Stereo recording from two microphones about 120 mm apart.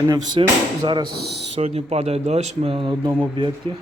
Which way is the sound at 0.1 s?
35° right (ahead or behind).